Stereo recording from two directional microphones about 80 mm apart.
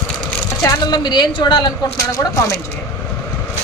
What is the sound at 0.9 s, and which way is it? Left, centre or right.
Speech, left.